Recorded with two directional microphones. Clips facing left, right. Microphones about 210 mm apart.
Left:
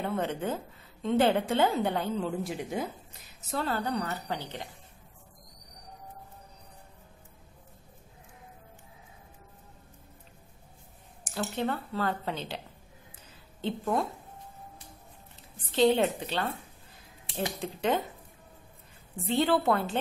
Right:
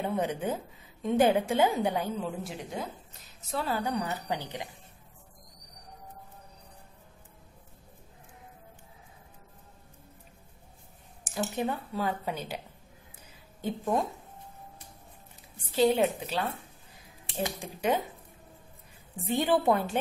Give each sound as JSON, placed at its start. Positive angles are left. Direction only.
{"t": 0.0, "sound": "a woman's voice", "side_deg": -15}
{"t": 2.7, "sound": "a woman's voice", "side_deg": 0}
{"t": 11.3, "sound": "a woman's voice", "side_deg": -10}
{"t": 15.5, "sound": "a woman's voice", "side_deg": -10}
{"t": 17.6, "sound": "a woman's voice", "side_deg": -10}
{"t": 19.2, "sound": "a woman's voice", "side_deg": -15}